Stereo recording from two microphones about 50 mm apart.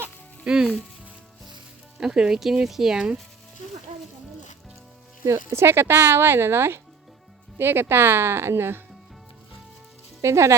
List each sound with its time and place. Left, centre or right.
0.4 s speech: centre
2.0 s speech: centre
5.2 s speech: right
10.2 s speech: right